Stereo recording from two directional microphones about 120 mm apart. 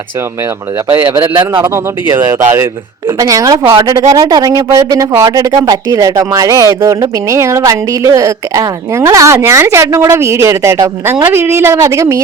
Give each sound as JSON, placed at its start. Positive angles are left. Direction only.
{"t": 1.2, "sound": "a man's voice", "side_deg": -45}
{"t": 1.6, "sound": "speech", "side_deg": -25}
{"t": 3.7, "sound": "a man's voice", "side_deg": -45}
{"t": 3.9, "sound": "speech", "side_deg": -30}